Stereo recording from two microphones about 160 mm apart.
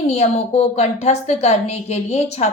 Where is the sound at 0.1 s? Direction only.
40° left (ahead or behind).